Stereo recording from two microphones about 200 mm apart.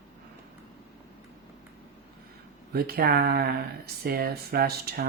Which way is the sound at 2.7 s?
50° right (ahead or behind).